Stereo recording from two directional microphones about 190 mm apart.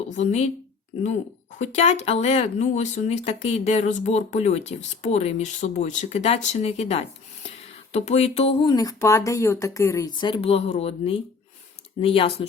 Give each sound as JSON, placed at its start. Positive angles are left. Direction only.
{"t": 0.2, "sound": "speech", "side_deg": 35}